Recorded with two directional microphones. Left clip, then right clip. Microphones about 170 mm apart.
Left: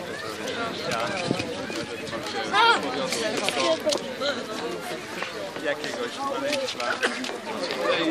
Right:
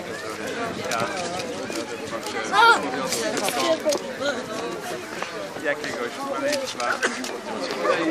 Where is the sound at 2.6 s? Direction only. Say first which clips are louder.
Right 4 dB; 55° right (ahead or behind).